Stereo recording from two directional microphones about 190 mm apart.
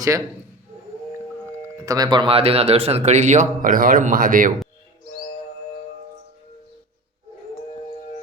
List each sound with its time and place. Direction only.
1.8 s speech: 20° right (ahead or behind); by 4.5 s 45° right (ahead or behind)